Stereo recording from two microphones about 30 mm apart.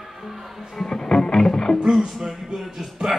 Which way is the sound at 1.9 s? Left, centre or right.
Centre.